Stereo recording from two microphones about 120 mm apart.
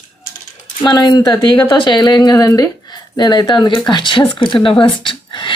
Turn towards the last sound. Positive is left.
turn(degrees=40)  # may be behind; listen again after turning